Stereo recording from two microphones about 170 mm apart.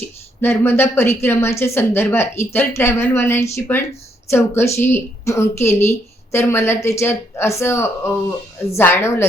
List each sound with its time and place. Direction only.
0.4 s speech: 15° left (ahead or behind)